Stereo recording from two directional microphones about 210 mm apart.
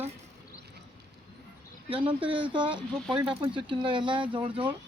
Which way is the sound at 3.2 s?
10° right (ahead or behind).